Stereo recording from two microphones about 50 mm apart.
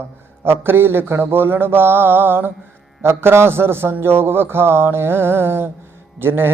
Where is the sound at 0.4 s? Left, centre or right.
Right.